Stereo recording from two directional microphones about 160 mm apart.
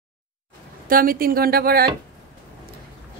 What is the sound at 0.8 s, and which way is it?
Speech, 60° right (ahead or behind).